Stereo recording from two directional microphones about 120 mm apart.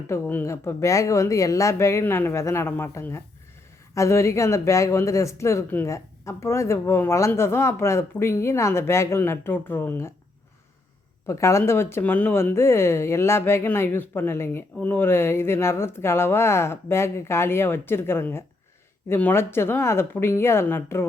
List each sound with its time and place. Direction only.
0.1 s speech: 20° left (ahead or behind)
11.3 s speech: 25° left (ahead or behind)